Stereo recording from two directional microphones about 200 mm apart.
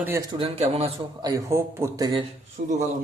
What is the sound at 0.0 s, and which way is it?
Speech, 15° right (ahead or behind).